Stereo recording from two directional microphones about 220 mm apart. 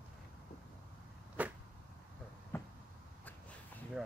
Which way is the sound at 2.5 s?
10° left (ahead or behind).